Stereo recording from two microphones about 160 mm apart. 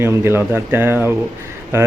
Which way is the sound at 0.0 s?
15° right (ahead or behind).